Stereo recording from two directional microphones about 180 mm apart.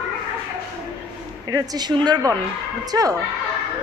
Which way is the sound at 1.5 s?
20° right (ahead or behind).